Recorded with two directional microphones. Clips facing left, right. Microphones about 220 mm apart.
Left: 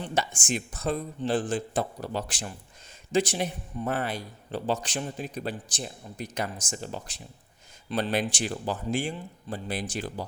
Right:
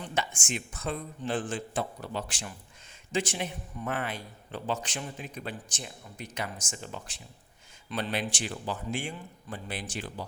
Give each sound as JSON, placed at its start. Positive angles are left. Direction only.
{"t": 0.0, "sound": "a man's voice", "side_deg": 35}